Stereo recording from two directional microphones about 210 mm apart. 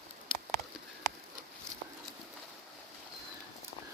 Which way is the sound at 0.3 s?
25° left (ahead or behind).